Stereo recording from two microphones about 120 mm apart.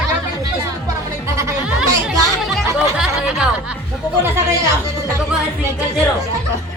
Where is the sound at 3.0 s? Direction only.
5° right (ahead or behind).